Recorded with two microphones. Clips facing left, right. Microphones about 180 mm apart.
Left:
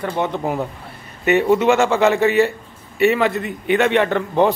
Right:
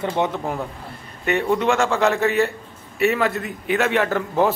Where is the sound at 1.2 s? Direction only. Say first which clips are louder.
Left 5 dB; 5° left (ahead or behind).